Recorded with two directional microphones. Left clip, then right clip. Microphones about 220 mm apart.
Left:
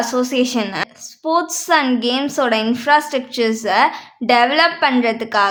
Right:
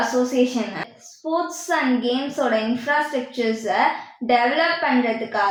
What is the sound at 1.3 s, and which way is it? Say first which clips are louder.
A woman's voice: left 7 dB; 35° left (ahead or behind).